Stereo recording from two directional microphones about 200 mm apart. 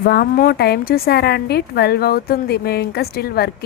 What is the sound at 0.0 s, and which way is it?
A woman's voice, 50° left (ahead or behind).